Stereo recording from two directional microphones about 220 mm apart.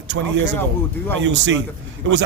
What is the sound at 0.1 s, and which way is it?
Speech, 60° right (ahead or behind).